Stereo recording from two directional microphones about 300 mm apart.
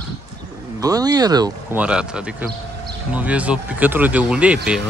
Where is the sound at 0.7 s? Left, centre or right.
Centre.